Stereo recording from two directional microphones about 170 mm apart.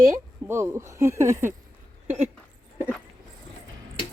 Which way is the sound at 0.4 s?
15° right (ahead or behind).